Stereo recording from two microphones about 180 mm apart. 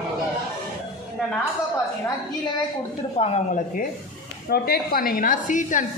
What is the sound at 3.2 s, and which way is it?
Speech, 35° left (ahead or behind).